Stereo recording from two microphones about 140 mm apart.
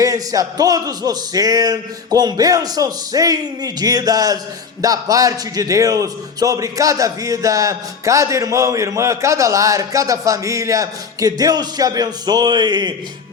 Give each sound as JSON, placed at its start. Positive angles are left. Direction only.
{"t": 0.0, "sound": "a man's voice", "side_deg": -25}